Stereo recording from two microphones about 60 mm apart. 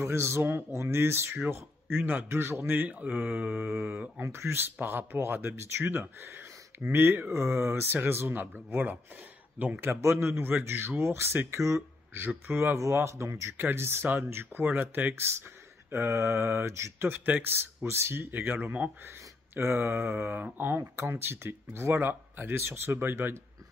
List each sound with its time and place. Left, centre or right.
0.0 s speech: right
2.2 s speech: right
2.8 s speech: right
9.8 s speech: right
12.4 s speech: right
12.7 s speech: right
13.6 s speech: right
17.0 s speech: right
19.0 s speech: right